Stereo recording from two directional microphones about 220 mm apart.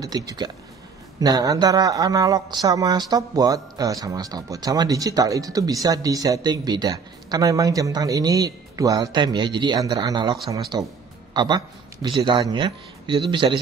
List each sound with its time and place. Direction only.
0.0 s a man's voice: 15° right (ahead or behind)